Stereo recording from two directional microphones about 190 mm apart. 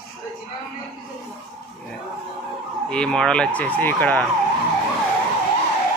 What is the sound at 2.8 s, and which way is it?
Speech, 5° left (ahead or behind).